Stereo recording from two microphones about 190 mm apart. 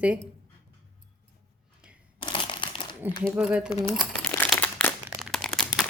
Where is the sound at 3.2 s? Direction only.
5° right (ahead or behind).